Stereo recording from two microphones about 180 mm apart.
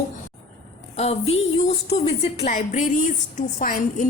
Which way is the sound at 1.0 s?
35° left (ahead or behind).